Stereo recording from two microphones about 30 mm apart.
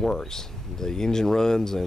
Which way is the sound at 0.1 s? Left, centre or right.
Centre.